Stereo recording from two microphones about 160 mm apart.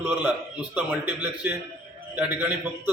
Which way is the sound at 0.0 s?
10° right (ahead or behind).